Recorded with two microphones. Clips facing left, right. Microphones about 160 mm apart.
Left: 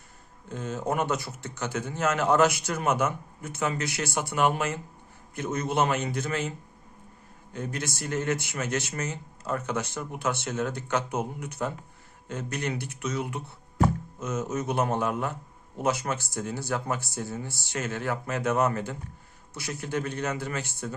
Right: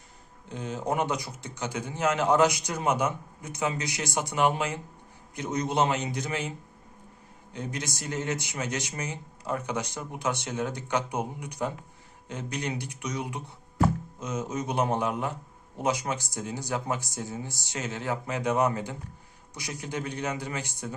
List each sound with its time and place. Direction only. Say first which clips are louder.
0.5 s a man's voice: even; 15° right (ahead or behind)
7.5 s a man's voice: left 1 dB; 15° right (ahead or behind)